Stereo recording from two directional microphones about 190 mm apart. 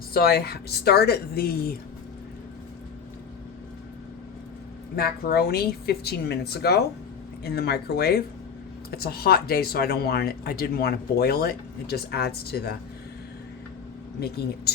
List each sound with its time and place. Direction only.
0.1 s speech: 55° left (ahead or behind)
4.9 s speech: 55° left (ahead or behind)
14.2 s speech: 55° left (ahead or behind)